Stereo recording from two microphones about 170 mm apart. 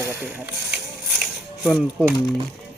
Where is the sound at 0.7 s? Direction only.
5° right (ahead or behind).